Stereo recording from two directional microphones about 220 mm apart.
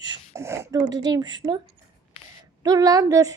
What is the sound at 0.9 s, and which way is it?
Speech, 20° right (ahead or behind).